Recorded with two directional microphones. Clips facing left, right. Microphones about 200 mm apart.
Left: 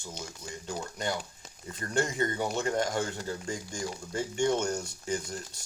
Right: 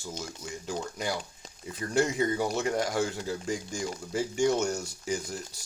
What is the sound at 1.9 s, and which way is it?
Speech, 5° right (ahead or behind).